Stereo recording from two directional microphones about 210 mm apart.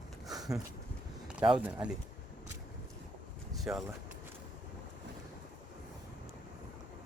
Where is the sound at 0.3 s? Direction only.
15° right (ahead or behind).